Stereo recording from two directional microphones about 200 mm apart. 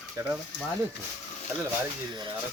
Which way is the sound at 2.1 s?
20° right (ahead or behind).